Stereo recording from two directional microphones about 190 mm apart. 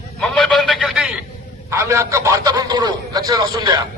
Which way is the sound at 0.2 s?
5° left (ahead or behind).